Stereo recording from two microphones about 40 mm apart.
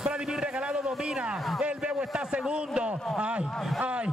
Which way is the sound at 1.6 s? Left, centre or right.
Right.